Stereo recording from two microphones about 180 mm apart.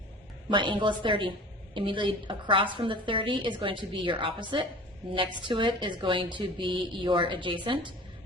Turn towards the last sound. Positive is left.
turn(degrees=-25)  # may be behind; listen again after turning